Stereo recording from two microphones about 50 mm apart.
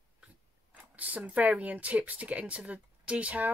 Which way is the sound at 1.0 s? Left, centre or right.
Right.